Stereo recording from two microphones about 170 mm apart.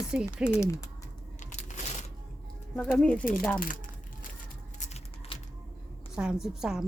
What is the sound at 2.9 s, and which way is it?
Speech, 5° left (ahead or behind).